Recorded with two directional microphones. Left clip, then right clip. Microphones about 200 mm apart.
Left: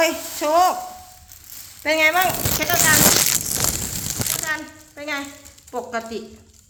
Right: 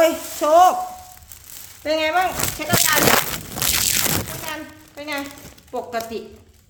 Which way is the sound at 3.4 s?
Centre (ahead or behind).